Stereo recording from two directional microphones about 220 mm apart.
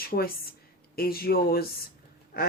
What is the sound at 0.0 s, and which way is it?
A woman's voice, 45° left (ahead or behind).